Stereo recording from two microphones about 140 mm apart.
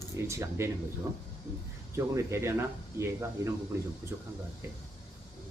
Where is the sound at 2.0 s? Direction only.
20° right (ahead or behind).